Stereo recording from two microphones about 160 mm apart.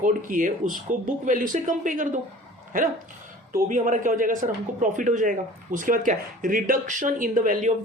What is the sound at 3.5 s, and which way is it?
Speech, 60° right (ahead or behind).